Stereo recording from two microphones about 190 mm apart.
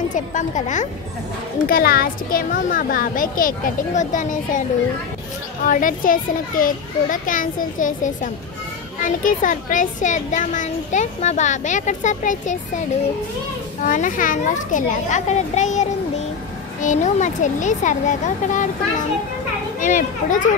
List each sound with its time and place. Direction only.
0.1 s a child's voice: 40° left (ahead or behind)
1.7 s speech: 50° left (ahead or behind)
5.7 s a child's voice: 45° left (ahead or behind)
13.8 s a child's voice: 45° left (ahead or behind)
19.8 s speech: 45° left (ahead or behind)